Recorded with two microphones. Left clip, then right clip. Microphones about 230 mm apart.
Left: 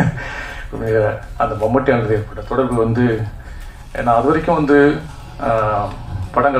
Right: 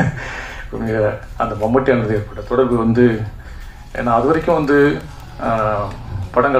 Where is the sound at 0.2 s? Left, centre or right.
Right.